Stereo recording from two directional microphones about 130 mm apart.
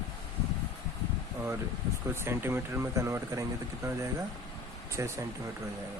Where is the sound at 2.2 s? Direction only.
20° right (ahead or behind).